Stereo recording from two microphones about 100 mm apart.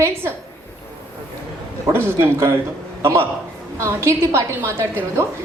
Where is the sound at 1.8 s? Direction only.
25° right (ahead or behind).